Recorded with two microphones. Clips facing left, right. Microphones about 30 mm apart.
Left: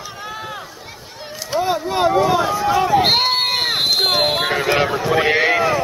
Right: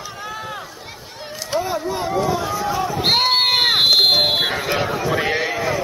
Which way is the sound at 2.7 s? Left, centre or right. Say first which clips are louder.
Left 7 dB; left.